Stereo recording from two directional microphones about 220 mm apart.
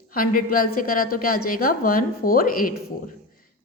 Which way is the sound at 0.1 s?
40° left (ahead or behind).